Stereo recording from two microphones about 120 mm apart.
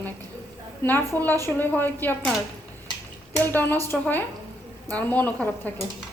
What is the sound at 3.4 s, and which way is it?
A woman's voice, 15° left (ahead or behind).